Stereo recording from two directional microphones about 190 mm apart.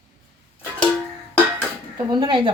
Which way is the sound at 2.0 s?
25° right (ahead or behind).